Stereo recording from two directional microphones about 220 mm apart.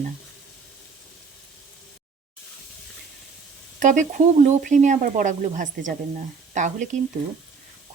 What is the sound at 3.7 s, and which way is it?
Speech, 35° right (ahead or behind).